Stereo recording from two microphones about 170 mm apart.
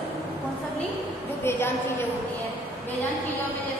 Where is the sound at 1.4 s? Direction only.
15° left (ahead or behind).